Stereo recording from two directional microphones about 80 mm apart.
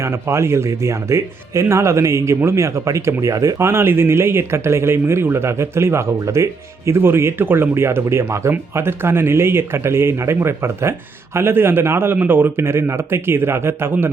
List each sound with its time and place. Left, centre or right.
0.0 s speech: right